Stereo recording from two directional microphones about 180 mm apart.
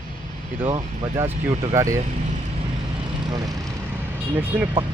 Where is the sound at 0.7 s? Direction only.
15° right (ahead or behind).